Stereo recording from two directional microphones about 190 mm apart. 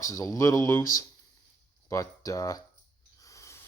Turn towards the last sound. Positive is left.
turn(degrees=15)  # may be behind; listen again after turning